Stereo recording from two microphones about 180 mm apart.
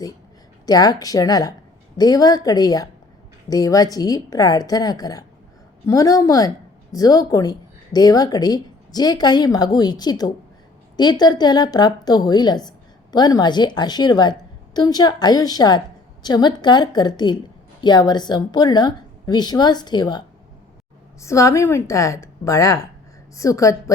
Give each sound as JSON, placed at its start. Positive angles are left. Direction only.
{"t": 0.6, "sound": "a woman's voice", "side_deg": 20}